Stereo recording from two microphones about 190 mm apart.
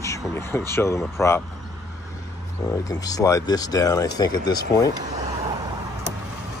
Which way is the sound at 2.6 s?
20° left (ahead or behind).